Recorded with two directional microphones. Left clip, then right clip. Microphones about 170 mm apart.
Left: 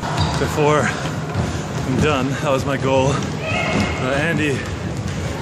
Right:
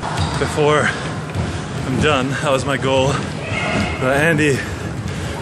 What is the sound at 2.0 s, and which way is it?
Speech, centre (ahead or behind).